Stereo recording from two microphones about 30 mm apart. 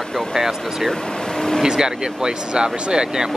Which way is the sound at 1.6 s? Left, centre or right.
Right.